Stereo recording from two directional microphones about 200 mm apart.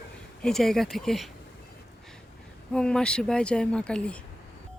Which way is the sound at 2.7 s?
5° left (ahead or behind).